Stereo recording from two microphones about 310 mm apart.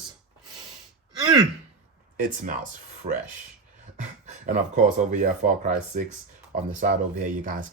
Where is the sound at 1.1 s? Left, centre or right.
Centre.